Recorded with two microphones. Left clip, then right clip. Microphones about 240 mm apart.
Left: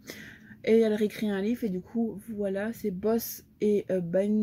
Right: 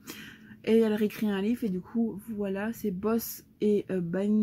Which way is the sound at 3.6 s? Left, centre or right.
Centre.